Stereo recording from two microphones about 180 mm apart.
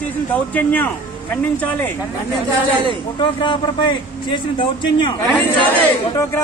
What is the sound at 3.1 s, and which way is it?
A man's voice, 25° left (ahead or behind).